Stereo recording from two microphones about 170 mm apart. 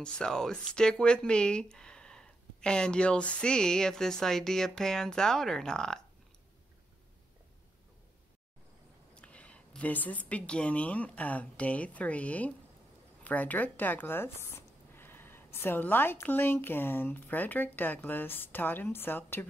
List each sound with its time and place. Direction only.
0.0 s speech: 5° left (ahead or behind)
9.1 s a woman's voice: 5° left (ahead or behind)